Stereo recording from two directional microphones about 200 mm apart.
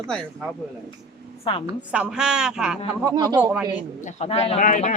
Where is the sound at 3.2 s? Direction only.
20° right (ahead or behind).